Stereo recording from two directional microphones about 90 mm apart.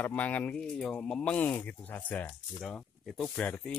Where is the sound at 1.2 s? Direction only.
15° left (ahead or behind).